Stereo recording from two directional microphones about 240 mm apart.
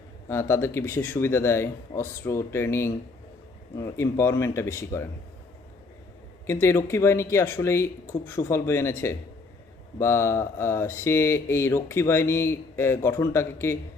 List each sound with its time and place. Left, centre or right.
0.3 s speech: centre
6.5 s speech: centre